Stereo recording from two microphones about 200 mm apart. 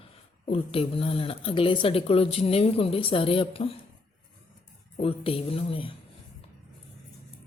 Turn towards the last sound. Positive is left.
turn(degrees=25)  # may be behind; listen again after turning